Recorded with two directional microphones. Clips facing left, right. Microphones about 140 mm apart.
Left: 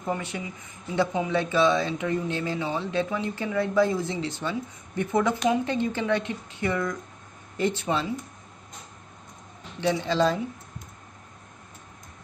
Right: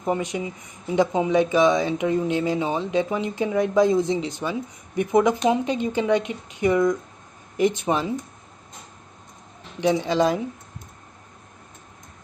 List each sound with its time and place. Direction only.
0.0 s speech: 20° right (ahead or behind)
9.8 s speech: 15° right (ahead or behind)